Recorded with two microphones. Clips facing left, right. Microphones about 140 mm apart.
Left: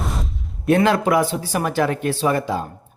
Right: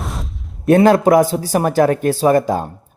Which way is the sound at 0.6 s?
40° right (ahead or behind).